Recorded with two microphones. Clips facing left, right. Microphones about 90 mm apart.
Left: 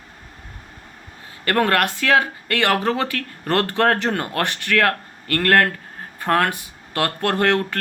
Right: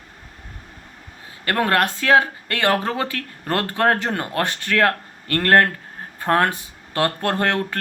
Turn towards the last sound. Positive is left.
turn(degrees=-20)  # may be behind; listen again after turning